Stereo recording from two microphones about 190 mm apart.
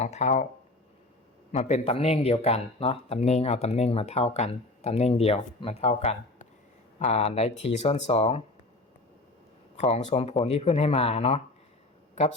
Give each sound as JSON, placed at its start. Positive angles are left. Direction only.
{"t": 0.0, "sound": "speech", "side_deg": 35}
{"t": 1.5, "sound": "speech", "side_deg": 35}
{"t": 9.8, "sound": "speech", "side_deg": 35}